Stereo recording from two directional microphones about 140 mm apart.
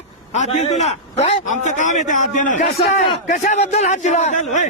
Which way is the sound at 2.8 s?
50° left (ahead or behind).